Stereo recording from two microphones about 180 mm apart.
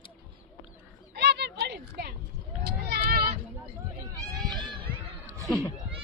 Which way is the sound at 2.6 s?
60° right (ahead or behind).